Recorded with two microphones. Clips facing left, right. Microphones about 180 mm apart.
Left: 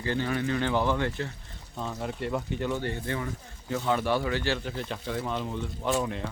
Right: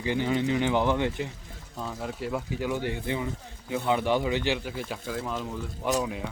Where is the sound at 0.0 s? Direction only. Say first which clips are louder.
Right 2 dB; 15° right (ahead or behind).